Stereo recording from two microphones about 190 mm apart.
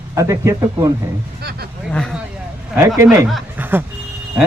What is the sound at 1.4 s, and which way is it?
Speech, 55° right (ahead or behind).